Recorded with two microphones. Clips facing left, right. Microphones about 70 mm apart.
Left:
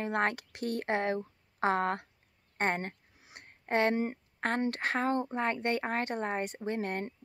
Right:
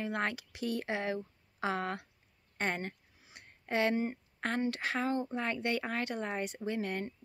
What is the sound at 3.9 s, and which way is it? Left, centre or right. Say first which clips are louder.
A woman's voice: left 1 dB; left.